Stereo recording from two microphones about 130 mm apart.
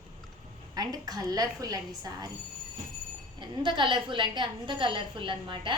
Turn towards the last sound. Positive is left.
turn(degrees=-40)  # may be behind; listen again after turning